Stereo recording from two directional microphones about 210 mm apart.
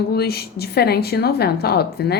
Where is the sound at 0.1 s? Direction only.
50° left (ahead or behind).